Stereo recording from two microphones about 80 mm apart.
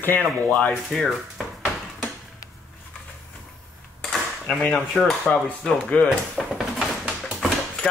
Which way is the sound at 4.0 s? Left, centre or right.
Centre.